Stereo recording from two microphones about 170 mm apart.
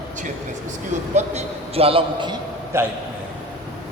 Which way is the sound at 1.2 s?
40° right (ahead or behind).